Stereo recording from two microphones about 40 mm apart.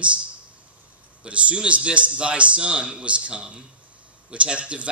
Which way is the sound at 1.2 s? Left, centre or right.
Right.